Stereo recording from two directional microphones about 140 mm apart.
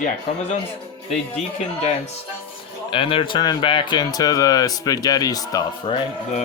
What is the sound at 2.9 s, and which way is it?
Speech, 40° left (ahead or behind).